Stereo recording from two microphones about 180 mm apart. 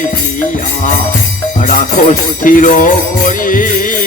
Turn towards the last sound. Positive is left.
turn(degrees=50)  # may be behind; listen again after turning